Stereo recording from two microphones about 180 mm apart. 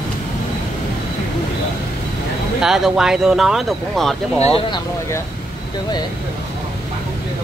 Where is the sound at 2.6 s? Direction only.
5° right (ahead or behind).